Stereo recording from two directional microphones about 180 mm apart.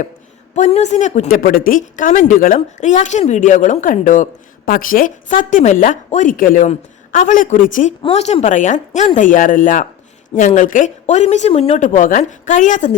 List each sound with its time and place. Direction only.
0.5 s a woman's voice: 40° left (ahead or behind)